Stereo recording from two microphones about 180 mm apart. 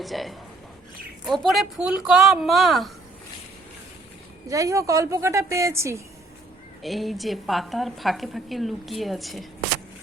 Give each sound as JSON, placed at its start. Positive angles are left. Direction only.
{"t": 0.0, "sound": "a woman's voice", "side_deg": 0}
{"t": 4.4, "sound": "a woman's voice", "side_deg": -20}
{"t": 6.8, "sound": "a woman's voice", "side_deg": 0}